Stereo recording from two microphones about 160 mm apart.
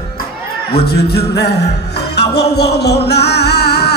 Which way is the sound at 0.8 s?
85° left.